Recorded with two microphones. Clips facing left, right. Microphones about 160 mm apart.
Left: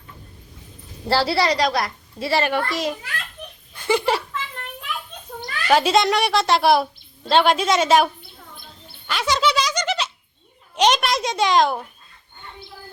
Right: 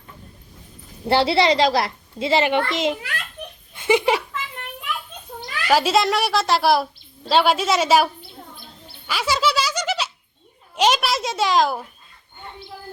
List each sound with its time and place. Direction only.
1.0 s a woman's voice: 20° right (ahead or behind)
5.4 s a woman's voice: 5° right (ahead or behind)
9.0 s a sound: 5° right (ahead or behind)